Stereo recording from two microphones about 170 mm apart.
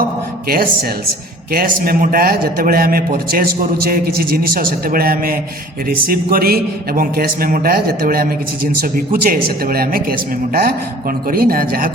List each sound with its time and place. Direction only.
0.4 s a man's voice: 60° right (ahead or behind)